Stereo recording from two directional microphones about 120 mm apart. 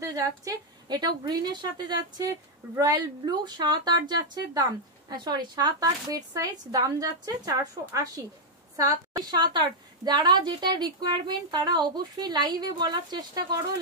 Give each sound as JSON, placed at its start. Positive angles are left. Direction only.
{"t": 0.0, "sound": "a woman's voice", "side_deg": -25}
{"t": 5.1, "sound": "a woman's voice", "side_deg": -35}